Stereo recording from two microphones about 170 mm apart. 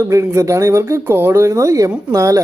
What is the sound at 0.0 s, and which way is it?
Speech, 15° right (ahead or behind).